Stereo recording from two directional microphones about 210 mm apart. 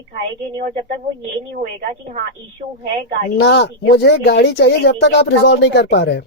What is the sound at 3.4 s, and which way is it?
Speech, 55° left (ahead or behind).